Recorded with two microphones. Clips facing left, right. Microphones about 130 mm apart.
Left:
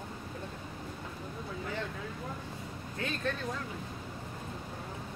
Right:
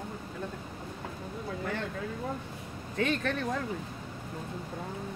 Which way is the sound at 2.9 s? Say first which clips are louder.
Right 6 dB; 80° right.